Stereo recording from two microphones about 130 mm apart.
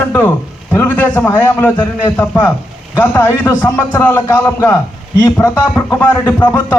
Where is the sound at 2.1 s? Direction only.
10° left (ahead or behind).